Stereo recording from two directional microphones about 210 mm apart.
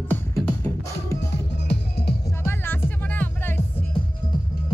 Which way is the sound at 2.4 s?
10° left (ahead or behind).